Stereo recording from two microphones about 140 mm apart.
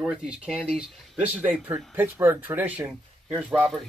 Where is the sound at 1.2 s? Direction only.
10° right (ahead or behind).